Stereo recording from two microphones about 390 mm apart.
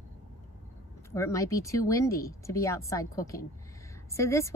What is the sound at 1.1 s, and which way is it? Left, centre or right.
A woman's voice, centre.